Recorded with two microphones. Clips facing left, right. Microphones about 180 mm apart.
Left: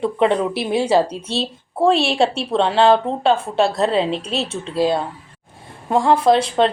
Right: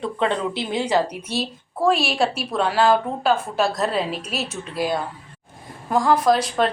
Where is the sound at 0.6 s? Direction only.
25° left (ahead or behind).